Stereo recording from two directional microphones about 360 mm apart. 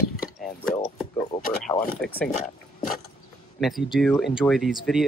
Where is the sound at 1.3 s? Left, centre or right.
Centre.